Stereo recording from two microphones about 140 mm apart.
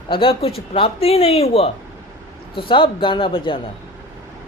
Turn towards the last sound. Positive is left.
turn(degrees=40)  # may be behind; listen again after turning